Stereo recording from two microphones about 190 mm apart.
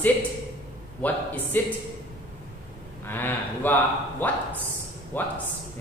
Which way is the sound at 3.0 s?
10° left (ahead or behind).